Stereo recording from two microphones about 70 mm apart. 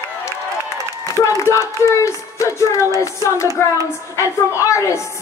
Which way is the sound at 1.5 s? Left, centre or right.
Left.